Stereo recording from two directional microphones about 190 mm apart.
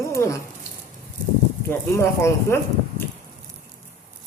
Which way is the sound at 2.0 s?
15° left (ahead or behind).